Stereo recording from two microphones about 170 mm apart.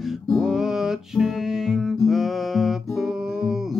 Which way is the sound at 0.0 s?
Centre (ahead or behind).